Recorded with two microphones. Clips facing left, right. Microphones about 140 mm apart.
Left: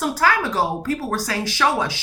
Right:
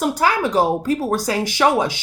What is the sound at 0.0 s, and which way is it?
Speech, 20° right (ahead or behind).